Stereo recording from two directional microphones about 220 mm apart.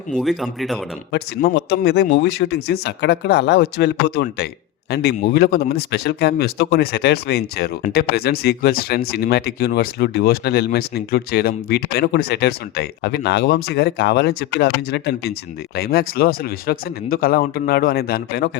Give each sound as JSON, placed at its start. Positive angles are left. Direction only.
{"t": 0.1, "sound": "speech", "side_deg": 0}
{"t": 1.1, "sound": "speech", "side_deg": 50}